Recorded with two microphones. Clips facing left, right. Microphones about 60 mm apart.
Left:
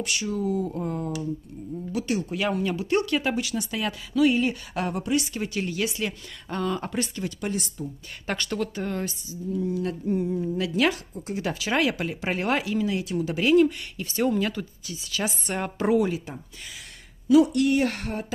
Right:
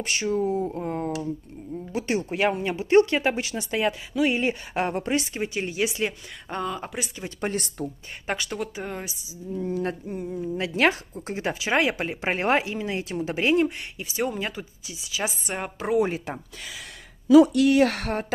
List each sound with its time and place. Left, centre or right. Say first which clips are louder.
0.0 s speech: right 3 dB; right
6.6 s speech: left 4 dB; centre
7.2 s speech: right 1 dB; right
7.5 s speech: right 2 dB; right
8.3 s speech: left 1 dB; centre
9.5 s speech: even; right
10.3 s speech: left 2 dB; centre
10.6 s speech: right 3 dB; right
14.0 s speech: left 4 dB; centre
17.7 s speech: right 4 dB; right